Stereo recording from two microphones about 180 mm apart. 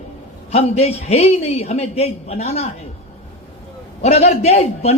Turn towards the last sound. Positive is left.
turn(degrees=35)  # may be behind; listen again after turning